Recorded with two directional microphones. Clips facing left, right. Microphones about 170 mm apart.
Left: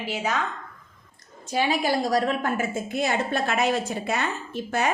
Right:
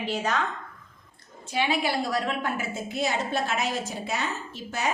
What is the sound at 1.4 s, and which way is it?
A woman's voice, 40° left (ahead or behind).